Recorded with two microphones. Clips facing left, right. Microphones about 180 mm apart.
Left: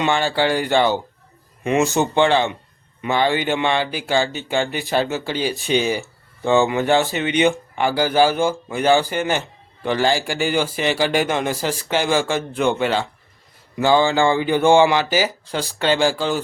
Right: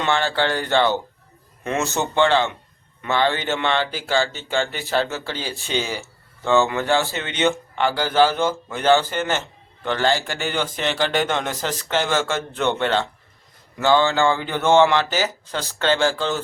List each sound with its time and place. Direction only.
0.0 s speech: 15° left (ahead or behind)